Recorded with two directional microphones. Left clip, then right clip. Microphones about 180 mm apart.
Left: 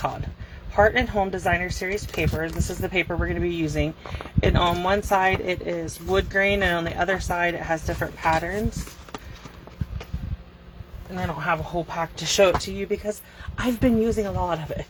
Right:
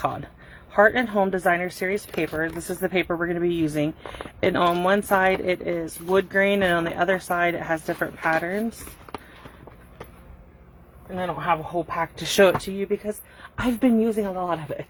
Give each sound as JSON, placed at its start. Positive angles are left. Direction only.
{"t": 0.8, "sound": "speech", "side_deg": -35}
{"t": 11.2, "sound": "speech", "side_deg": -45}
{"t": 12.6, "sound": "speech", "side_deg": -30}